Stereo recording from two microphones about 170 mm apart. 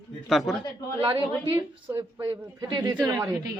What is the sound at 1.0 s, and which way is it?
Speech, 30° right (ahead or behind).